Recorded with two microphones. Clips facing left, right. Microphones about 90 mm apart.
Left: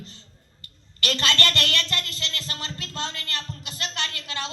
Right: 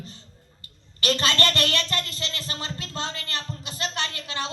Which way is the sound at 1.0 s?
30° right (ahead or behind).